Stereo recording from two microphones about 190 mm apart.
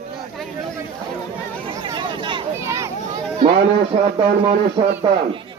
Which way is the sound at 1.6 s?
25° right (ahead or behind).